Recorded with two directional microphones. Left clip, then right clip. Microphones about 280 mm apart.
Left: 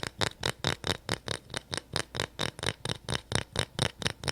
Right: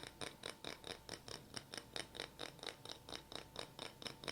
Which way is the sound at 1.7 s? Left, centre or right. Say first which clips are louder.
Left 15 dB; left.